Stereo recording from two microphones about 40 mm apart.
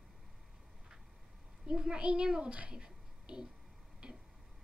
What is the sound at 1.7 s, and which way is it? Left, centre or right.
A child's voice, right.